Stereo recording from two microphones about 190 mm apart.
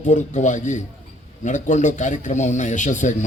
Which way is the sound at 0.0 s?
40° left (ahead or behind).